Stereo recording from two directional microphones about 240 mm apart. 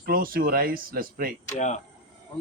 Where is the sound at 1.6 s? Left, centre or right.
Left.